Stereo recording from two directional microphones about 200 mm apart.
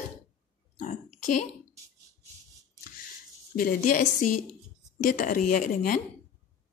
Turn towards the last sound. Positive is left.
turn(degrees=45)  # may be behind; listen again after turning